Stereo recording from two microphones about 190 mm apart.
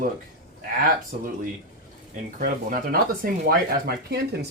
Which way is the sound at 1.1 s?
45° right (ahead or behind).